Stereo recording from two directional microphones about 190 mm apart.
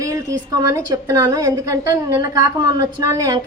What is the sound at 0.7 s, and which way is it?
A woman's voice, 15° right (ahead or behind).